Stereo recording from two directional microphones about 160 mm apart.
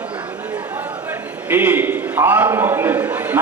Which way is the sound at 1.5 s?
10° right (ahead or behind).